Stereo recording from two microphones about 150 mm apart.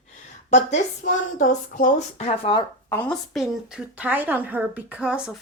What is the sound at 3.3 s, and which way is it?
A woman's voice, 5° right (ahead or behind).